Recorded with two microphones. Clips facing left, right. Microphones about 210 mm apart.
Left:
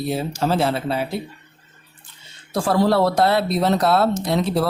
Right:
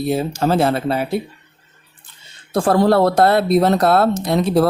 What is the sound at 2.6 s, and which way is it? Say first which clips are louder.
Speech: right 4 dB; 50° right (ahead or behind).